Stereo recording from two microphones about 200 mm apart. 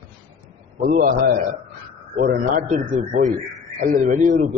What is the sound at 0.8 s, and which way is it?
A man's voice, 45° right (ahead or behind).